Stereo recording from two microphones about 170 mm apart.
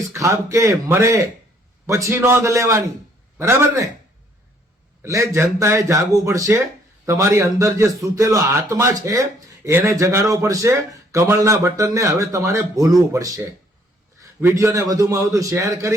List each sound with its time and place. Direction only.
0.1 s speech: 20° right (ahead or behind)
5.0 s a man's voice: 15° right (ahead or behind)